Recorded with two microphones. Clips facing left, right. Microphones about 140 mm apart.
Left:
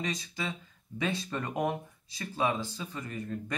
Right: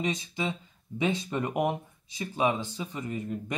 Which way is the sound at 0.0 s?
20° right (ahead or behind).